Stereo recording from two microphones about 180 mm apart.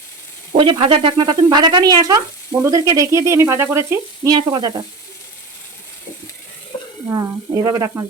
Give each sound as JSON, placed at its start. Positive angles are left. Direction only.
{"t": 0.5, "sound": "speech", "side_deg": -25}
{"t": 7.1, "sound": "speech", "side_deg": -15}